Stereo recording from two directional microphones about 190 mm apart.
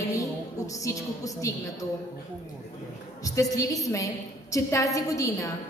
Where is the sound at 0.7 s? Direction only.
15° left (ahead or behind).